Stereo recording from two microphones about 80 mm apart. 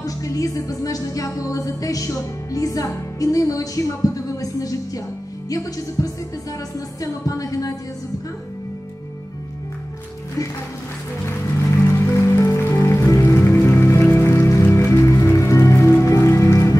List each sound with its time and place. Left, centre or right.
0.0 s music: left
11.2 s music: left